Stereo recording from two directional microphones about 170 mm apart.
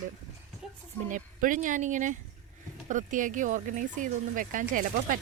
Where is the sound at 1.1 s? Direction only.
50° right (ahead or behind).